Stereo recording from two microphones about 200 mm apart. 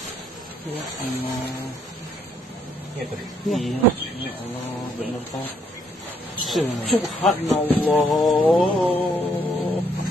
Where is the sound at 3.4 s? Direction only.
Centre (ahead or behind).